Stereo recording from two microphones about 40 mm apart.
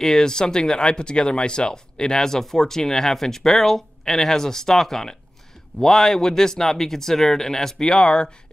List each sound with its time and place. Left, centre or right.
0.0 s speech: centre
7.8 s speech: left